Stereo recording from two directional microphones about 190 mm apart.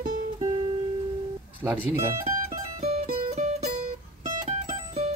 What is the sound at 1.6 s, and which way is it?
Speech, 10° right (ahead or behind).